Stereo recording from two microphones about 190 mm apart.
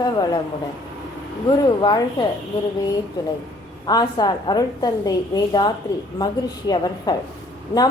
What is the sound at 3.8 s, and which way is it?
A woman's voice, 20° left (ahead or behind).